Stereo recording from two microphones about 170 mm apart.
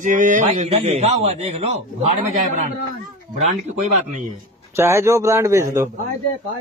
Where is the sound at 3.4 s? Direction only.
40° right (ahead or behind).